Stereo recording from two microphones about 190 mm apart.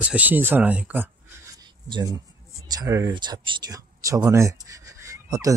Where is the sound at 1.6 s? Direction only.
20° right (ahead or behind).